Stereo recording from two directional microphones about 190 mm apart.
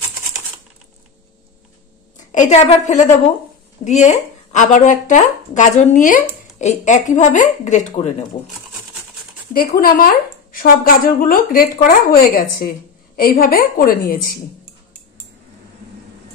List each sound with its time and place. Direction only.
2.1 s a woman's voice: 40° left (ahead or behind)
9.5 s a woman's voice: 50° left (ahead or behind)